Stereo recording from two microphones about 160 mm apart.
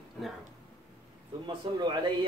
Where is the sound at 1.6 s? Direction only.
30° right (ahead or behind).